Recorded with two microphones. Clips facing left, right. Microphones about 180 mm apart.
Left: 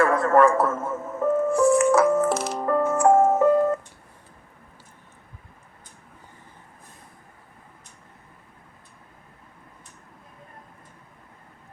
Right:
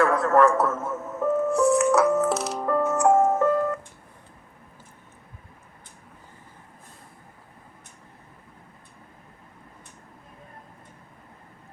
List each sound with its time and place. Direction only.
0.0 s a man's voice: centre (ahead or behind)
1.1 s music: centre (ahead or behind)
3.4 s music: 20° left (ahead or behind)